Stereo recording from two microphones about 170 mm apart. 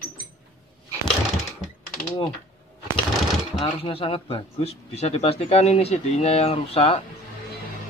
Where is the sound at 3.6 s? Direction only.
30° left (ahead or behind).